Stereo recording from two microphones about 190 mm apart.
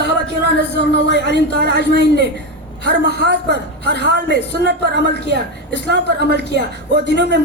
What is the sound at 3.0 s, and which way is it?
Speech, 65° left (ahead or behind).